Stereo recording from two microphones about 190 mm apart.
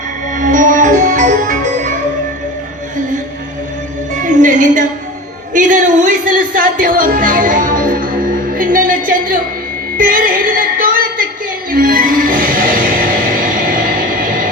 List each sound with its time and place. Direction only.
0.3 s music: 45° right (ahead or behind)
4.1 s music: 40° right (ahead or behind)